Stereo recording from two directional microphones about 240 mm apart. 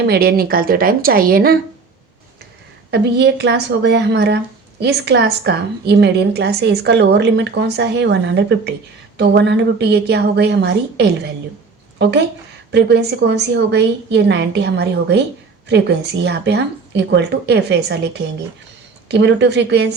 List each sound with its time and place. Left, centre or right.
0.0 s speech: right
2.9 s a woman's voice: right
16.2 s a woman's voice: right